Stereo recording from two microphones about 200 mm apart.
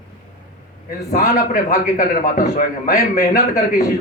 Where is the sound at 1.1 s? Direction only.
40° left (ahead or behind).